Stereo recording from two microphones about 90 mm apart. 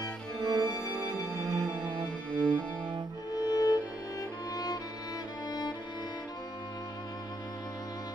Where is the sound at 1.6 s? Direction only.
10° left (ahead or behind).